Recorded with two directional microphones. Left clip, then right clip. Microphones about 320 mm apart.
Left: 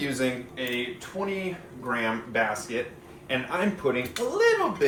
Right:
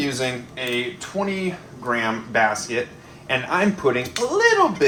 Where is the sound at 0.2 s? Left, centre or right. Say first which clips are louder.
Right 3 dB; right.